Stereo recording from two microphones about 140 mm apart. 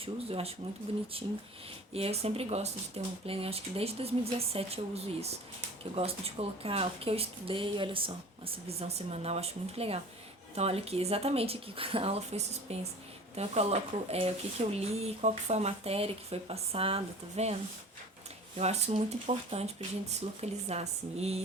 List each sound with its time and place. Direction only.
0.0 s speech: 45° right (ahead or behind)